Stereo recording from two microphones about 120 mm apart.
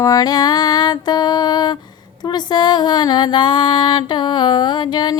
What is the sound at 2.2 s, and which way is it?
Speech, 35° left (ahead or behind).